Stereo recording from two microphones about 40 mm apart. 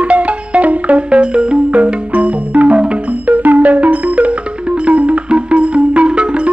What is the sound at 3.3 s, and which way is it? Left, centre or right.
Music, right.